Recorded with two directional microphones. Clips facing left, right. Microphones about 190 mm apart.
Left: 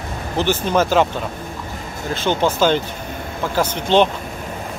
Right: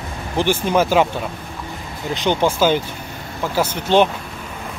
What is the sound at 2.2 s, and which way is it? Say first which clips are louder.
Speech: even; 15° right (ahead or behind).